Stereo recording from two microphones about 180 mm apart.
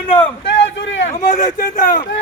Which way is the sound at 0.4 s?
80° left.